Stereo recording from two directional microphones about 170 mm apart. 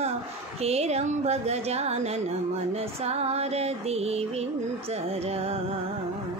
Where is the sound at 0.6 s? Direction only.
40° right (ahead or behind).